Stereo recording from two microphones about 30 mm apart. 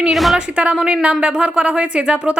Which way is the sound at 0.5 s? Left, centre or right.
Right.